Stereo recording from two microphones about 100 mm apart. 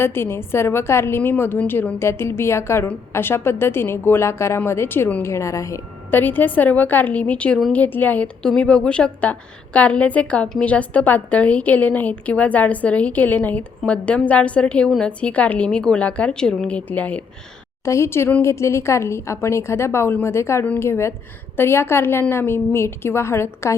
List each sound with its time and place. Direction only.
0.0 s a woman's voice: 25° left (ahead or behind)
6.1 s a woman's voice: 20° left (ahead or behind)
17.8 s a woman's voice: 30° left (ahead or behind)